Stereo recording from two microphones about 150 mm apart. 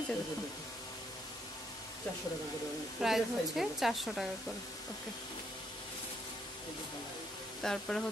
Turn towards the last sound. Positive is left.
turn(degrees=5)  # may be behind; listen again after turning